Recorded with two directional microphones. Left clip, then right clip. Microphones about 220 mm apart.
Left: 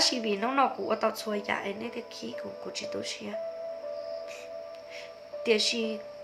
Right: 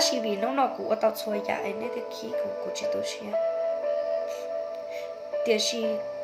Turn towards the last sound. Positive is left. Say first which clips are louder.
# right 1 dB
turn(degrees=5)  # may be behind; listen again after turning